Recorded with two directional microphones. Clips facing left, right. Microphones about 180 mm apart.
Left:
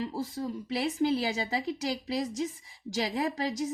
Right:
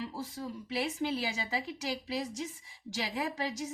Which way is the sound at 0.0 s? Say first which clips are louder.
Left 6 dB; 40° left (ahead or behind).